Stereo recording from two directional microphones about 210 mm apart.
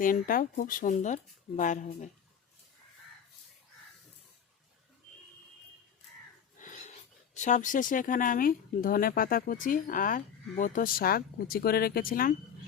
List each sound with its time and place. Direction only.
0.0 s speech: 40° left (ahead or behind)
6.6 s a sound: 35° left (ahead or behind)
7.3 s speech: 35° left (ahead or behind)